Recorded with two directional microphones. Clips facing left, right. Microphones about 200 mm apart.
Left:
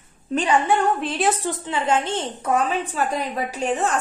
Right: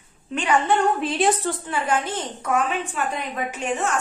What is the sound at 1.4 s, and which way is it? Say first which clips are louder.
A woman's voice: left 1 dB; 20° left (ahead or behind).